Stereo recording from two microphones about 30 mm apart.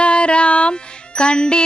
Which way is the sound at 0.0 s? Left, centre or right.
Left.